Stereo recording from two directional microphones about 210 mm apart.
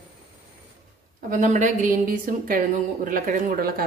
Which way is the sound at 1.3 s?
35° right (ahead or behind).